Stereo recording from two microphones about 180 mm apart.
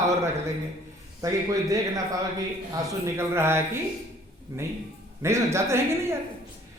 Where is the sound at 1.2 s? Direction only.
20° right (ahead or behind).